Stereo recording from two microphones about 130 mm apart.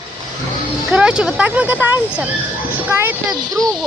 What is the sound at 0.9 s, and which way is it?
Speech, 5° right (ahead or behind).